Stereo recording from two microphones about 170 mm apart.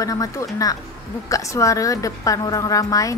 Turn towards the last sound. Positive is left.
turn(degrees=20)  # may be behind; listen again after turning